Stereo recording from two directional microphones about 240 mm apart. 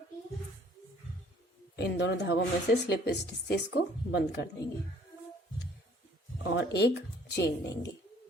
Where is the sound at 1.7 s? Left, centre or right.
Left.